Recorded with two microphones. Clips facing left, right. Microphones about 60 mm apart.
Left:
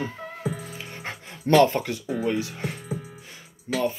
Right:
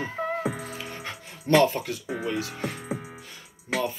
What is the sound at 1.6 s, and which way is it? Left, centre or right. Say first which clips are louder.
Speech: left 3 dB; left.